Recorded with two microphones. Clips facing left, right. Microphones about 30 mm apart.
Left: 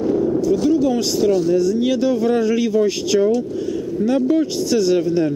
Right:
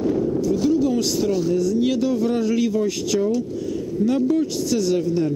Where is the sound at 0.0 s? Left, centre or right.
Left.